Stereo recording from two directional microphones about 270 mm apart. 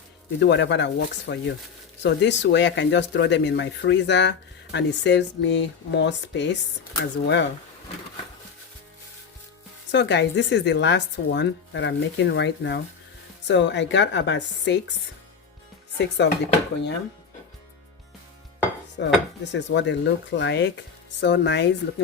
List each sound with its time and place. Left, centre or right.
0.3 s speech: left
9.9 s speech: left
16.0 s speech: left
18.9 s speech: left